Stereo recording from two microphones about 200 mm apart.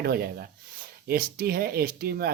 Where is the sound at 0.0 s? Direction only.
50° right (ahead or behind).